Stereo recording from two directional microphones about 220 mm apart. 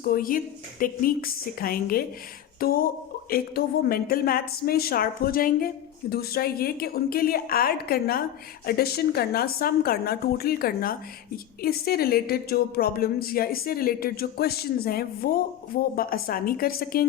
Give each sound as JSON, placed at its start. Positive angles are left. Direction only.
{"t": 0.0, "sound": "a woman's voice", "side_deg": 40}